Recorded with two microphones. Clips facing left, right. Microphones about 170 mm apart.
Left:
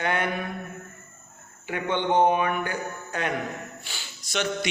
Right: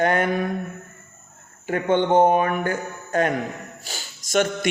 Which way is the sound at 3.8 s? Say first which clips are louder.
Right 4 dB; 40° right (ahead or behind).